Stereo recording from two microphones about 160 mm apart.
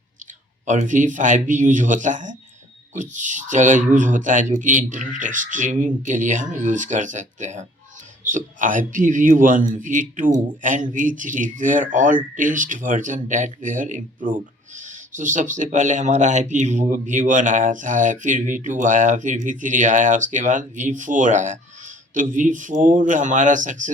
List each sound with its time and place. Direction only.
0.6 s speech: 50° right (ahead or behind)